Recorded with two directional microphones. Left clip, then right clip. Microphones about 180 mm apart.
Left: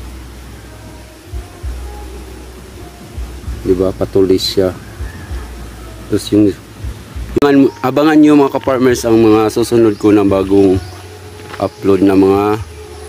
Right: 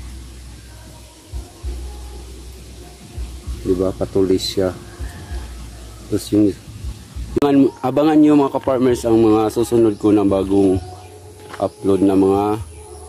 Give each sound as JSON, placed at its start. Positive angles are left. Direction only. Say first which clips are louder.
{"t": 3.8, "sound": "speech", "louder": "left 6 dB", "side_deg": 0}
{"t": 6.1, "sound": "speech", "louder": "left 5 dB", "side_deg": 5}